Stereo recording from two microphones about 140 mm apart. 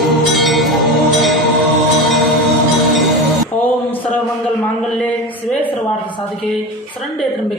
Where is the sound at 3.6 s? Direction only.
10° left (ahead or behind).